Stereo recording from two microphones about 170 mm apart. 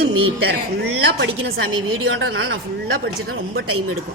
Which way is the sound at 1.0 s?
75° right (ahead or behind).